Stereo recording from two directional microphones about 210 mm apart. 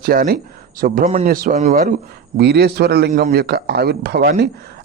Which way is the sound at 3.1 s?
35° right (ahead or behind).